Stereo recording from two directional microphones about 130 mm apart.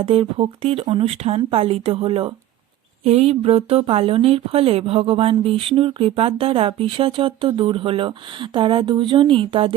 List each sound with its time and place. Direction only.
0.0 s speech: 45° right (ahead or behind)